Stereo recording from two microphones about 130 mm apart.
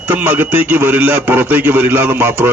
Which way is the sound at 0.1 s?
15° right (ahead or behind).